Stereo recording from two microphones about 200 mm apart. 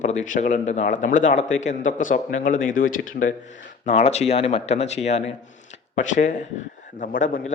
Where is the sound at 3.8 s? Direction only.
35° left (ahead or behind).